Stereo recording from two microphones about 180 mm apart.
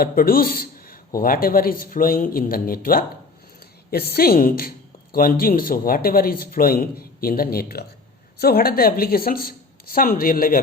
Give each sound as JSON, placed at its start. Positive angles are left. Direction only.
{"t": 0.0, "sound": "a man's voice", "side_deg": 55}